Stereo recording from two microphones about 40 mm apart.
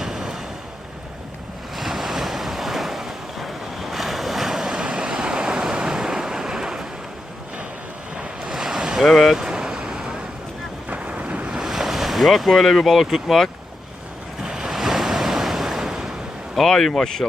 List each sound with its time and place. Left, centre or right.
0.0 s vehicle: centre
1.7 s waves: centre
4.7 s waves: right
8.1 s waves: right
8.5 s ocean: centre
9.0 s speech: centre
9.4 s vehicle: centre
10.8 s wind noise: right
11.5 s speech: centre
14.4 s waves: centre
16.6 s speech: centre